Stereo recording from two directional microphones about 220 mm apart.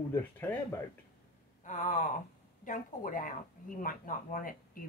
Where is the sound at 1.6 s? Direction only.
35° left (ahead or behind).